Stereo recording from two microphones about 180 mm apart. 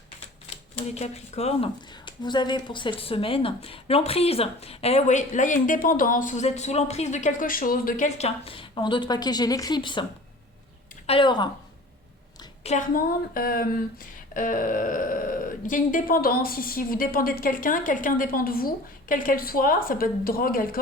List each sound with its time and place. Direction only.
0.5 s a woman's voice: 35° left (ahead or behind)
12.6 s speech: 45° left (ahead or behind)